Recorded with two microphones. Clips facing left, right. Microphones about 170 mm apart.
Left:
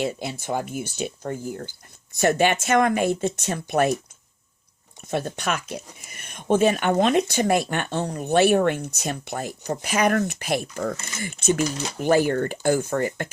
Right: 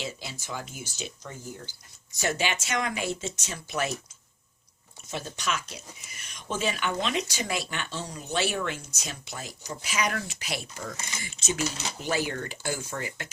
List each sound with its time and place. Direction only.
0.0 s speech: 55° left (ahead or behind)
5.0 s speech: 55° left (ahead or behind)